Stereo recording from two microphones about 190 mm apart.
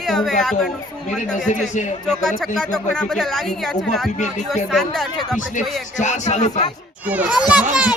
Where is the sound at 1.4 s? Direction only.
40° left (ahead or behind).